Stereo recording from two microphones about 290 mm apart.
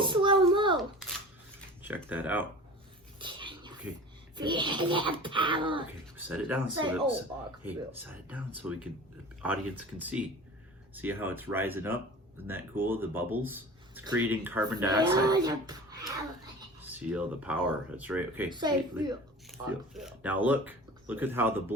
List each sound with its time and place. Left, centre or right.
0.0 s a sound: centre
1.8 s speech: centre
3.2 s a sound: centre
4.4 s speech: centre
6.1 s speech: centre
7.6 s speech: centre
19.5 s speech: centre